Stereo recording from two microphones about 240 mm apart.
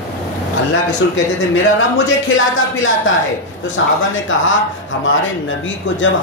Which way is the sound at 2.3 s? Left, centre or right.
Left.